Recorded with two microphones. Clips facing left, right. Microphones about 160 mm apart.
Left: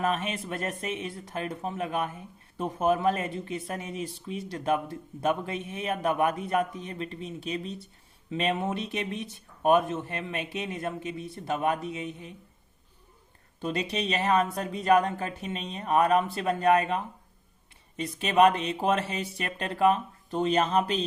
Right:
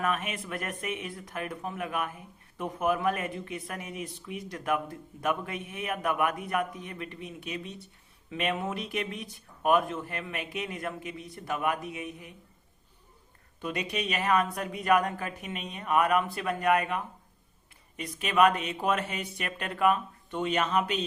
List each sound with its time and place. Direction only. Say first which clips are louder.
0.0 s speech: left 2 dB; 30° left (ahead or behind)
13.6 s speech: left 3 dB; 30° left (ahead or behind)